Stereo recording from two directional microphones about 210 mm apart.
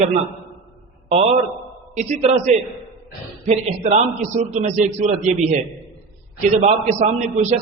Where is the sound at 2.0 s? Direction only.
35° right (ahead or behind).